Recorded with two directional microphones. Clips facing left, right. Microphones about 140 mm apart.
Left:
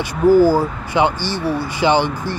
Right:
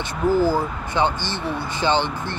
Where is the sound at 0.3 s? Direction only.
10° left (ahead or behind).